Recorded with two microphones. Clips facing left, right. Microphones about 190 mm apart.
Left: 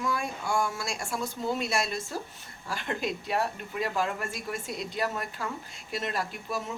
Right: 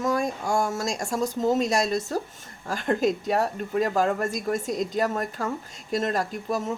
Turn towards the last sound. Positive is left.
turn(degrees=-45)  # may be behind; listen again after turning